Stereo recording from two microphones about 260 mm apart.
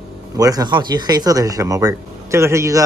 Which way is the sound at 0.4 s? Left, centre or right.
Centre.